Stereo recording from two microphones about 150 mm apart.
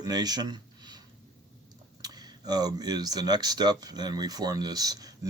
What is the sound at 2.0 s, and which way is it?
Speech, 25° right (ahead or behind).